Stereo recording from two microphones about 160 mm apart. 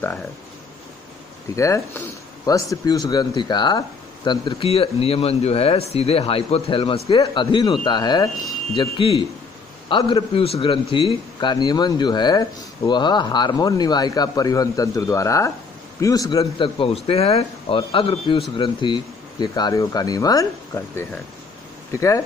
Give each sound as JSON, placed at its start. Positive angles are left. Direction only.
{"t": 1.5, "sound": "a man's voice", "side_deg": 20}